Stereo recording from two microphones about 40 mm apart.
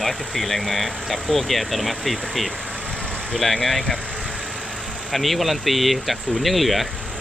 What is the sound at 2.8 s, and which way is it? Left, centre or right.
Vehicle, left.